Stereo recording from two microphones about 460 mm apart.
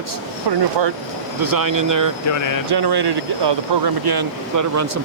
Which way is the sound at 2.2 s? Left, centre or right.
Left.